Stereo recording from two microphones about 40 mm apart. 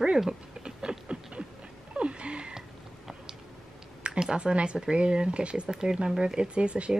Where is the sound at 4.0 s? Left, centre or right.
Centre.